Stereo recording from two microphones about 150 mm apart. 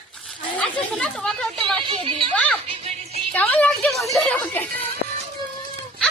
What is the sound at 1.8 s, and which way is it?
Speech, 35° right (ahead or behind).